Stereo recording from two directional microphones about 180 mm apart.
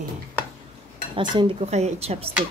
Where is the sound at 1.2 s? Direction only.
30° right (ahead or behind).